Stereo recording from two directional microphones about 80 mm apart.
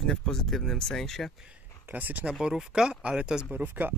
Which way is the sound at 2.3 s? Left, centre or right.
Centre.